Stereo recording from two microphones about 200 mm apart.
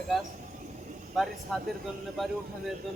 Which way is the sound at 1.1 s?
Centre (ahead or behind).